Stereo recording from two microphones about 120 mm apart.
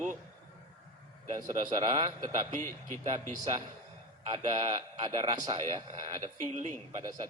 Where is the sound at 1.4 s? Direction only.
80° right.